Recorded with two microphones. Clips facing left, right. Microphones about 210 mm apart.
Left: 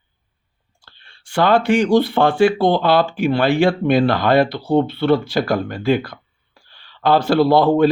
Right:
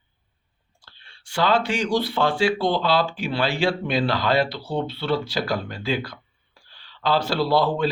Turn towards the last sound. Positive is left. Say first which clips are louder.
# left 8 dB
turn(degrees=55)  # may be behind; listen again after turning